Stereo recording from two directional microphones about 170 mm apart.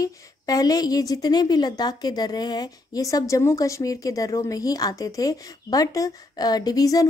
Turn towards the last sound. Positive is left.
turn(degrees=20)  # may be behind; listen again after turning